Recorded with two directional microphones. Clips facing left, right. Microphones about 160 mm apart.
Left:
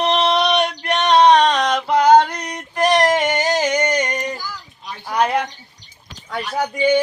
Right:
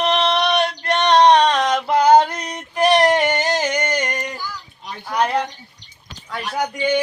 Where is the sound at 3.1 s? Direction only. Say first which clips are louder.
Even; 5° left (ahead or behind).